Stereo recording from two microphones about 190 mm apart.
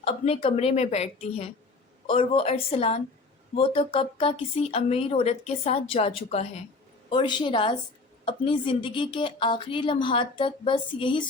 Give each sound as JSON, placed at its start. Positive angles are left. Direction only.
{"t": 0.0, "sound": "a woman's voice", "side_deg": 30}